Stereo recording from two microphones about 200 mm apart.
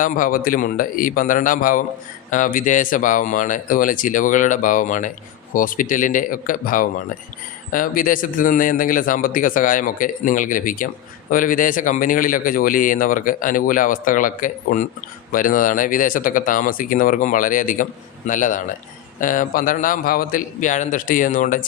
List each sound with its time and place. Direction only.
0.0 s speech: 45° left (ahead or behind)